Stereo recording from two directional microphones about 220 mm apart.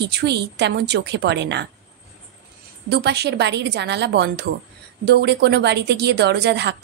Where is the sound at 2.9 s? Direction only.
50° right (ahead or behind).